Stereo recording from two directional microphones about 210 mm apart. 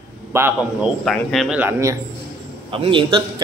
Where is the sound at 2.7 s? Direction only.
25° right (ahead or behind).